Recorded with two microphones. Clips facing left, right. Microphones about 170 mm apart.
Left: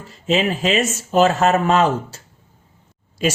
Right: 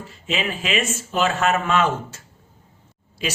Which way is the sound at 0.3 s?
40° left (ahead or behind).